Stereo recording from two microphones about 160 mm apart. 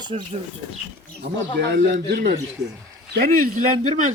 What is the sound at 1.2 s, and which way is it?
Speech, 90° right.